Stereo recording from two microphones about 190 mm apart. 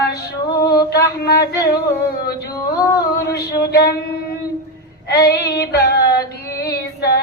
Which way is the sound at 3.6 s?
55° left (ahead or behind).